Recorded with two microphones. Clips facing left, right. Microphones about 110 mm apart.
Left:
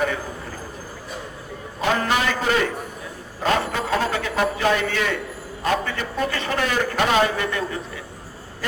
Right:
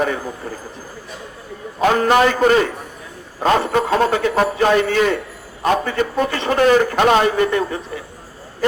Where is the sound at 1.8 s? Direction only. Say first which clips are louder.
Right 8 dB; 45° right (ahead or behind).